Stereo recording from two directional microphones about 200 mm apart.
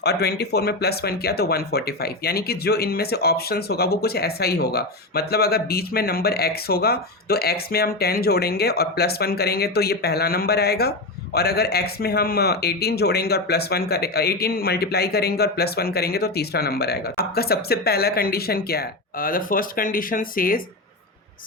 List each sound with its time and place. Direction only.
0.0 s speech: 55° left (ahead or behind)